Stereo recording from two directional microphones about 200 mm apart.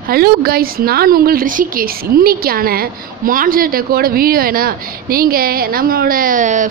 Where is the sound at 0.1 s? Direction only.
50° right (ahead or behind).